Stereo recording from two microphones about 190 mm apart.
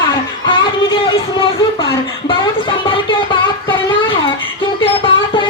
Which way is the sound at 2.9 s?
25° left (ahead or behind).